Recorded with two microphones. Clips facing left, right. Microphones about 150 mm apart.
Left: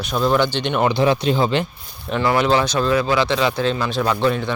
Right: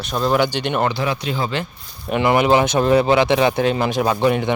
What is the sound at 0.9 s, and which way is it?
Speech, 25° left (ahead or behind).